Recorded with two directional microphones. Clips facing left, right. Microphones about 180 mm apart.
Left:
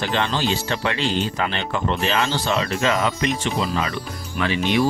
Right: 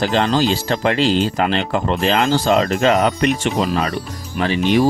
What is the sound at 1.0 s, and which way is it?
Speech, 90° right.